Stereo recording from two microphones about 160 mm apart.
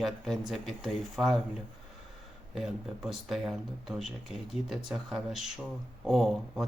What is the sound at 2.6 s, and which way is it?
Speech, centre (ahead or behind).